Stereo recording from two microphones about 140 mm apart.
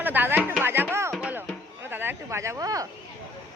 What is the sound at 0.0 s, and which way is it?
Music, 15° right (ahead or behind).